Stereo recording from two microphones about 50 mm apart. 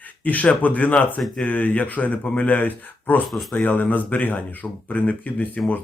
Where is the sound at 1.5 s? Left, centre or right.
Left.